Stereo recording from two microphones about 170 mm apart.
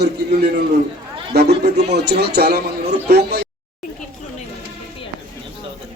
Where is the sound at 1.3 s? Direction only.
70° right (ahead or behind).